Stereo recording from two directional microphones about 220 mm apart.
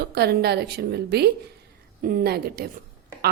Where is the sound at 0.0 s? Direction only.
45° right (ahead or behind).